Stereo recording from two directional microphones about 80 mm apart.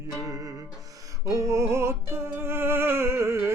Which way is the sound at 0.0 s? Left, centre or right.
Right.